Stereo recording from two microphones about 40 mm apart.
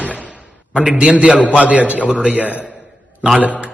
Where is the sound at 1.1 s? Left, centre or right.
Right.